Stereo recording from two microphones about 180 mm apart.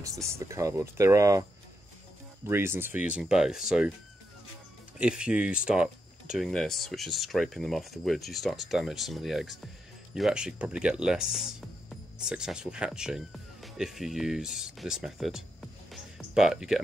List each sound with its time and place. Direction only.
0.0 s speech: 15° right (ahead or behind)
2.4 s speech: 15° right (ahead or behind)
4.9 s speech: 5° right (ahead or behind)
15.9 s music: centre (ahead or behind)